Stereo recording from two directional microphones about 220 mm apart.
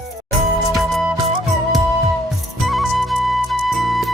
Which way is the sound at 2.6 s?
Centre (ahead or behind).